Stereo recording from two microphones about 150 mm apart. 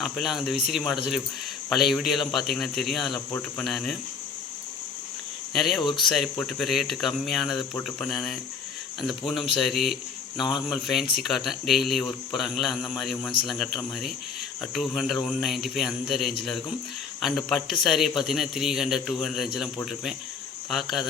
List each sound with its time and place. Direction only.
0.0 s a man's voice: centre (ahead or behind)
5.5 s a man's voice: centre (ahead or behind)
5.8 s speech: 30° left (ahead or behind)
6.1 s a man's voice: centre (ahead or behind)